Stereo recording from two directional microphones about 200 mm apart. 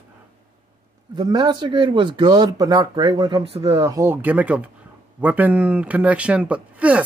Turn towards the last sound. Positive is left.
turn(degrees=-5)  # may be behind; listen again after turning